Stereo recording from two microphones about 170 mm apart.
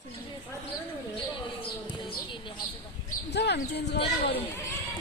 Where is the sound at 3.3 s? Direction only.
80° left.